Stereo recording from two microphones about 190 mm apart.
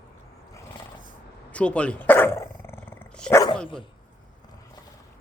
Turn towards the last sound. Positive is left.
turn(degrees=10)  # may be behind; listen again after turning